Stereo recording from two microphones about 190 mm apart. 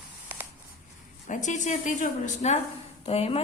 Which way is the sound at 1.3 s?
40° left (ahead or behind).